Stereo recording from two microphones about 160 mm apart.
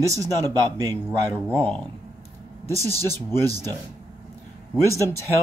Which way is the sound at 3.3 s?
20° right (ahead or behind).